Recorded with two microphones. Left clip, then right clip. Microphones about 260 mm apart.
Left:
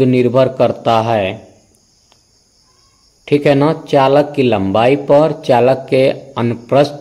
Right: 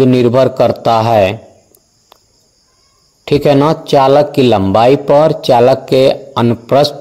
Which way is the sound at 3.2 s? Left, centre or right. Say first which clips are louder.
Right 2 dB; right.